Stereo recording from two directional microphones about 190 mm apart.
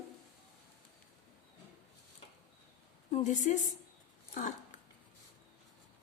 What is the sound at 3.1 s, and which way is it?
Speech, 40° left (ahead or behind).